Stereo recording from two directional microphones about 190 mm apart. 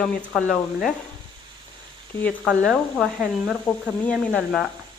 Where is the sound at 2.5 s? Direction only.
Centre (ahead or behind).